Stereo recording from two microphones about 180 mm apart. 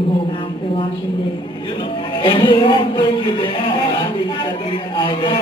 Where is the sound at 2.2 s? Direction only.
25° left (ahead or behind).